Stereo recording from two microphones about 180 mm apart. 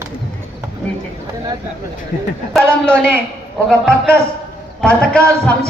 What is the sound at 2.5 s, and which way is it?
Speech, 5° left (ahead or behind).